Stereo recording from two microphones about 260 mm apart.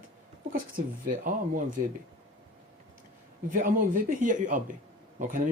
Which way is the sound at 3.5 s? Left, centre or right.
Right.